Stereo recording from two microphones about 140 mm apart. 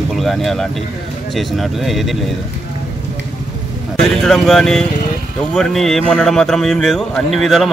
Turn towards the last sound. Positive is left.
turn(degrees=0)  # may be behind; listen again after turning